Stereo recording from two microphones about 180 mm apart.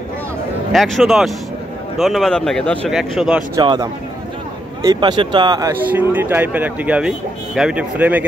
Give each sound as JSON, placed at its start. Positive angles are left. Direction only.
{"t": 0.7, "sound": "speech", "side_deg": 0}
{"t": 3.5, "sound": "speech", "side_deg": -20}
{"t": 5.9, "sound": "speech", "side_deg": -10}